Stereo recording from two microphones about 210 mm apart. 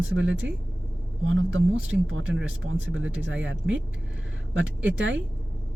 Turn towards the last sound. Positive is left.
turn(degrees=-65)  # may be behind; listen again after turning